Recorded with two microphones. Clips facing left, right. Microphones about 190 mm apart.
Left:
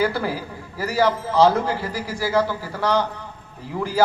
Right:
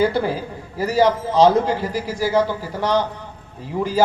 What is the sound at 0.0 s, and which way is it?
A man's voice, 20° right (ahead or behind).